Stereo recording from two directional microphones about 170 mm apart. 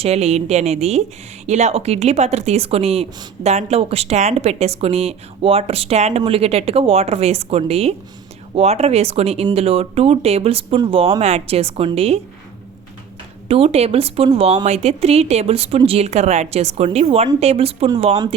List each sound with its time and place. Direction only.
0.0 s a woman's voice: 40° right (ahead or behind)
13.5 s a woman's voice: 35° right (ahead or behind)